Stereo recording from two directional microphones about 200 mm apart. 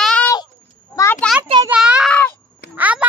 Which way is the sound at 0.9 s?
10° left (ahead or behind).